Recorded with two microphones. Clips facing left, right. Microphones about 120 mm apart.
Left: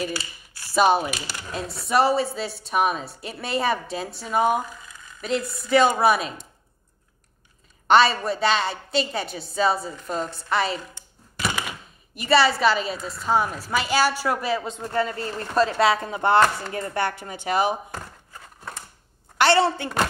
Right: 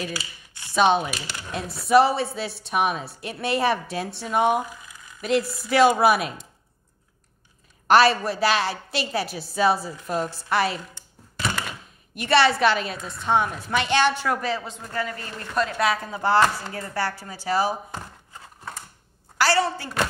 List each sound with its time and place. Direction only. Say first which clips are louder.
0.0 s speech: left 3 dB; centre (ahead or behind)
7.9 s speech: even; centre (ahead or behind)
11.3 s typewriter: even; 5° left (ahead or behind)
12.2 s speech: even; centre (ahead or behind)
14.7 s speech: left 5 dB; 25° left (ahead or behind)
19.3 s a woman's voice: left 3 dB; 25° left (ahead or behind)